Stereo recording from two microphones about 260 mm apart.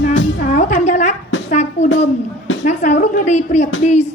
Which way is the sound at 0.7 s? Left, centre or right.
Left.